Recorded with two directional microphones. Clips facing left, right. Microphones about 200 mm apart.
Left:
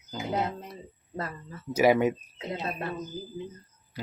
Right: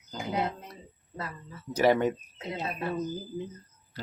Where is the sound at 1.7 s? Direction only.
10° left (ahead or behind).